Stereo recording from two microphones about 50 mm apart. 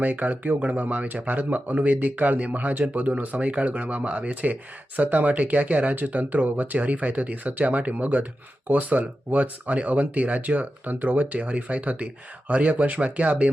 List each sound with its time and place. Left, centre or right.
0.0 s speech: right